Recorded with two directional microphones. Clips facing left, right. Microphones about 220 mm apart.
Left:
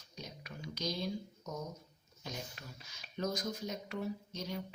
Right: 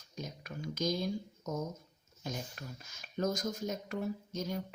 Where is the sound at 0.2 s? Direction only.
45° right (ahead or behind).